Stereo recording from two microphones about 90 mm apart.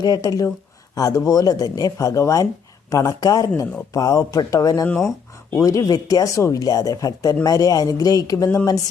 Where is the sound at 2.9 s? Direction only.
45° left (ahead or behind).